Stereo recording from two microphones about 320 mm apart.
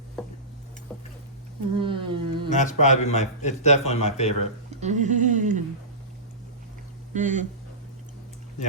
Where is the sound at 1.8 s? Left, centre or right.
Centre.